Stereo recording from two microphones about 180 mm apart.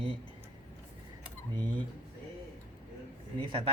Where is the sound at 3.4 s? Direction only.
30° right (ahead or behind).